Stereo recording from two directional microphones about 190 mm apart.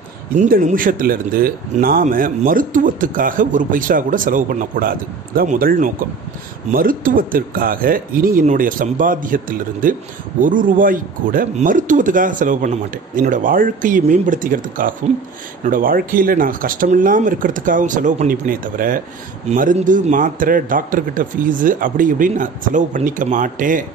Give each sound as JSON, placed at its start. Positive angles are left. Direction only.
{"t": 0.4, "sound": "speech", "side_deg": -40}